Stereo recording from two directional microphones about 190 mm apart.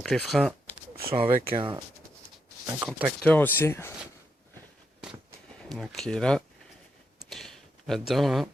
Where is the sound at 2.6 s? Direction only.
10° right (ahead or behind).